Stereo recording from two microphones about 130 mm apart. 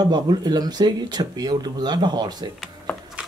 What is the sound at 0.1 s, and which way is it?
Speech, 35° right (ahead or behind).